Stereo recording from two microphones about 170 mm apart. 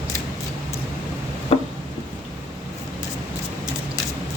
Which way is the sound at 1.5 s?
35° left (ahead or behind).